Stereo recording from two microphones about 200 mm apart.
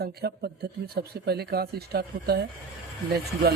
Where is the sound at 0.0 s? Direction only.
50° right (ahead or behind).